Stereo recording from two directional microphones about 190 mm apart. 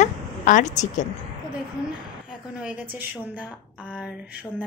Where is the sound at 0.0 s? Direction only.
40° left (ahead or behind).